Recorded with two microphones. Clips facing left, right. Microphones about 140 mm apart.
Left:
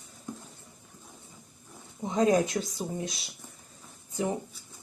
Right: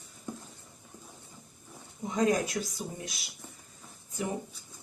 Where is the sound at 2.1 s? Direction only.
25° left (ahead or behind).